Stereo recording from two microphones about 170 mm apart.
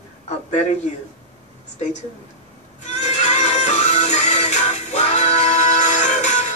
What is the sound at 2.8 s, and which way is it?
Music, 45° left (ahead or behind).